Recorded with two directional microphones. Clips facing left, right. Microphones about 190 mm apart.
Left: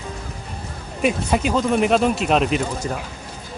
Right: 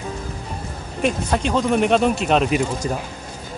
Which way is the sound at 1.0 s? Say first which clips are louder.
Left 1 dB; 5° left (ahead or behind).